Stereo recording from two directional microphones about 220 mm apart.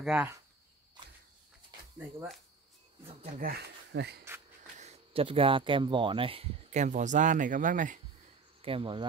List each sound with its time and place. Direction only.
0.0 s speech: 5° right (ahead or behind)
3.3 s speech: 45° right (ahead or behind)
4.7 s speech: 30° right (ahead or behind)
8.6 s cricket: 25° right (ahead or behind)